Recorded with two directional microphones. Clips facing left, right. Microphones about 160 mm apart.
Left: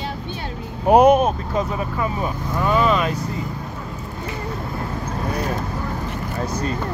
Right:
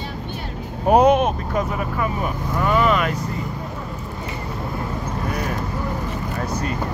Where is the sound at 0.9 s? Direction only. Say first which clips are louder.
Left 2 dB; 10° left (ahead or behind).